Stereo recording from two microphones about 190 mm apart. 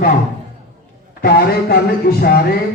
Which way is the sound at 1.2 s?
55° left (ahead or behind).